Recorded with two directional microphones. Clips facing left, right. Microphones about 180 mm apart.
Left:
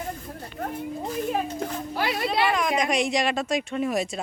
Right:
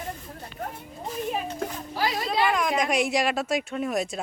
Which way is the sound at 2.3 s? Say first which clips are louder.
Right 1 dB; centre (ahead or behind).